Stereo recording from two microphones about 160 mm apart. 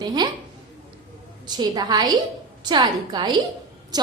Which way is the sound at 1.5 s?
25° right (ahead or behind).